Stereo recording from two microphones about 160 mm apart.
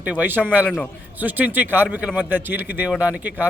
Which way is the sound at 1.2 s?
10° right (ahead or behind).